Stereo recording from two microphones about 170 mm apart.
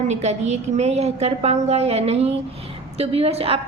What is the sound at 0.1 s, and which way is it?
A woman's voice, 40° right (ahead or behind).